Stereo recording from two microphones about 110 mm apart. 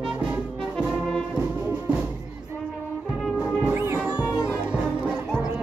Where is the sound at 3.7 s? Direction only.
20° right (ahead or behind).